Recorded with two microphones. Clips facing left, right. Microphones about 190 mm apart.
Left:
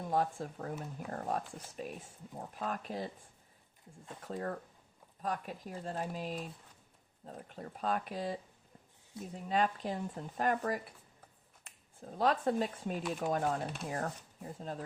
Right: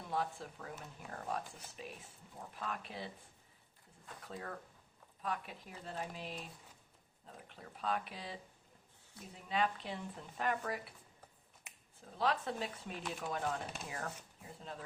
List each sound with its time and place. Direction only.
0.0 s speech: 45° left (ahead or behind)
4.2 s speech: 45° left (ahead or behind)
11.9 s speech: 45° left (ahead or behind)